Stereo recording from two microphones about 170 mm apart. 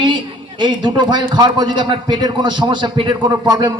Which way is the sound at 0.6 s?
25° right (ahead or behind).